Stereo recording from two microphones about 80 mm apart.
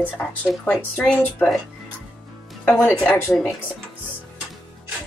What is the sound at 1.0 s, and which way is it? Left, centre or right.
Speech, left.